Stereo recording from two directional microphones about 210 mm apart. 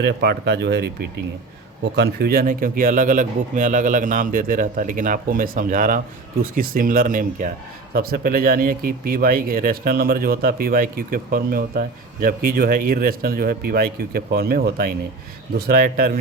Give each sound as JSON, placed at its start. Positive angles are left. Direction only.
{"t": 0.0, "sound": "speech", "side_deg": -50}
{"t": 2.0, "sound": "speech", "side_deg": -50}